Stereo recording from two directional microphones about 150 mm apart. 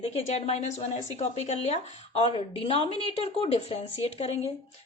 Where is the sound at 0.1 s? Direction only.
45° left (ahead or behind).